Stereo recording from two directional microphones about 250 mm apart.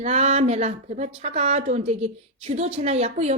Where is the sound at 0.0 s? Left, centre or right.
Right.